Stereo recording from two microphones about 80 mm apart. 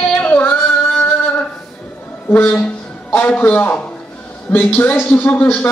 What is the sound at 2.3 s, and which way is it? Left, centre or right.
A man's voice, centre.